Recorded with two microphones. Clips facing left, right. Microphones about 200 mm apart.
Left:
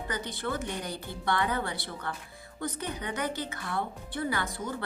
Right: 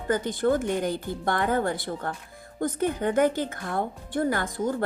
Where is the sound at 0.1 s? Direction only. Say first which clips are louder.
Right 12 dB; 50° right (ahead or behind).